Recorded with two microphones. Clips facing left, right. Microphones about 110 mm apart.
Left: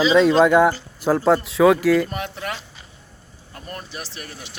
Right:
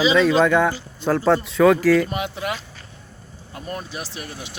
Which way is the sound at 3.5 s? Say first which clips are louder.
Right 4 dB; 15° right (ahead or behind).